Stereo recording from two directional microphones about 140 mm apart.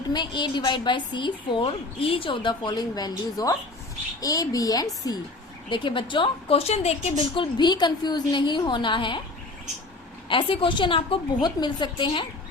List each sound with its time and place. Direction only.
0.1 s a woman's voice: 30° left (ahead or behind); by 7.3 s 50° left (ahead or behind)
7.3 s a woman's voice: 30° left (ahead or behind)
10.2 s a woman's voice: 40° left (ahead or behind)